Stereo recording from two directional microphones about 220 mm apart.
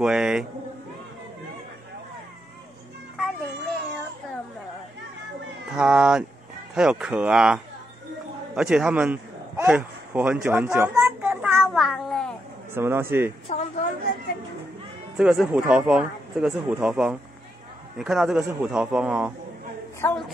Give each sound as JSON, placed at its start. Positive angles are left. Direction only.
{"t": 0.0, "sound": "speech", "side_deg": -5}
{"t": 5.7, "sound": "speech", "side_deg": -5}
{"t": 8.5, "sound": "a sound", "side_deg": -5}
{"t": 12.7, "sound": "a man's voice", "side_deg": -10}
{"t": 13.5, "sound": "a woman's voice", "side_deg": 30}
{"t": 15.1, "sound": "speech", "side_deg": -5}
{"t": 20.0, "sound": "a woman's voice", "side_deg": 10}